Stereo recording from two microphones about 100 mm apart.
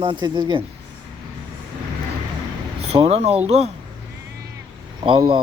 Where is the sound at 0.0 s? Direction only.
50° right (ahead or behind).